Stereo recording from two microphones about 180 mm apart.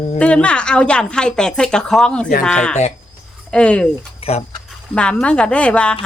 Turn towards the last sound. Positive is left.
turn(degrees=5)  # may be behind; listen again after turning